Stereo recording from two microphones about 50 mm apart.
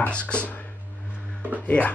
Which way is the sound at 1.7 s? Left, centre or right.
Left.